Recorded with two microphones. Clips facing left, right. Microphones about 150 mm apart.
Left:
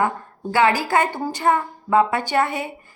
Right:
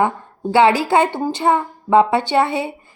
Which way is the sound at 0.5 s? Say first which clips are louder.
Right 4 dB; 25° right (ahead or behind).